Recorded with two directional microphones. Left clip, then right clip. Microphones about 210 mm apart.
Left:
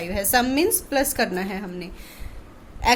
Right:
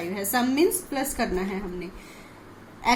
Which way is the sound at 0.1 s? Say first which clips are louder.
Left 6 dB; 50° left (ahead or behind).